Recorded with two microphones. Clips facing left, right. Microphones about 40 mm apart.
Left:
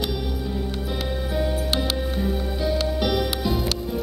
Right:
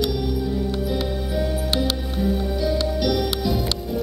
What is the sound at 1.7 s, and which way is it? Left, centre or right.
Music, centre.